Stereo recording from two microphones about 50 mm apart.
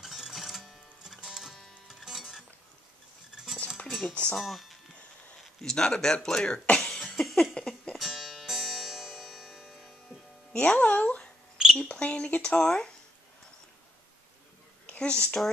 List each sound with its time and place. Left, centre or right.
0.0 s music: centre
3.5 s cutlery: centre
4.1 s speech: left
4.4 s a man's voice: centre
6.8 s cough: centre
7.9 s music: centre
10.5 s speech: left
11.5 s a sound: centre
11.8 s speech: left
14.9 s speech: left